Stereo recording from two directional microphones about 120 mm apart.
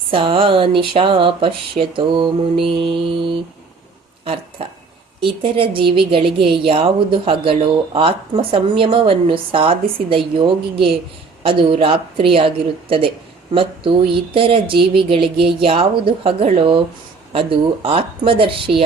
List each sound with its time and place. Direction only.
0.1 s speech: 50° right (ahead or behind)